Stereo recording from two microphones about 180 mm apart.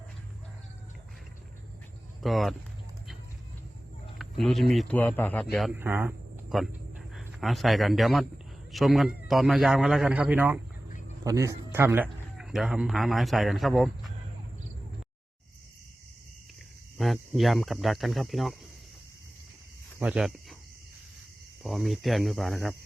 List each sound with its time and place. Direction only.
2.2 s speech: centre (ahead or behind)
4.2 s a sound: centre (ahead or behind)
4.7 s a man's voice: 5° left (ahead or behind)
5.8 s speech: 10° right (ahead or behind)
7.1 s a man's voice: centre (ahead or behind)
12.0 s a man's voice: centre (ahead or behind)
17.0 s speech: centre (ahead or behind)
20.0 s speech: 5° right (ahead or behind)
21.6 s speech: centre (ahead or behind)